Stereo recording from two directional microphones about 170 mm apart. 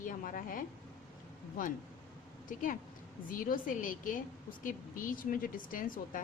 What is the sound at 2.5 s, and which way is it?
A woman's voice, 50° left (ahead or behind).